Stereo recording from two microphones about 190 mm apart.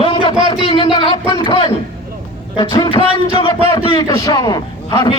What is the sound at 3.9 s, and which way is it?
A man's voice, 20° left (ahead or behind).